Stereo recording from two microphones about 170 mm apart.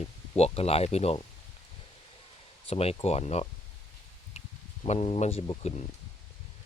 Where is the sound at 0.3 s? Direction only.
35° left (ahead or behind).